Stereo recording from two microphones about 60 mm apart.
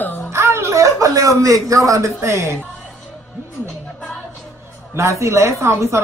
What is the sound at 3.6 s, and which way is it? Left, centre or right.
Music, centre.